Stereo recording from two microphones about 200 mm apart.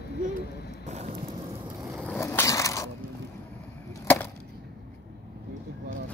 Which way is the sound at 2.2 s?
15° left (ahead or behind).